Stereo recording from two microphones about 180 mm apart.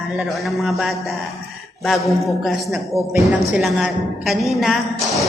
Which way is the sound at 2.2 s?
Centre (ahead or behind).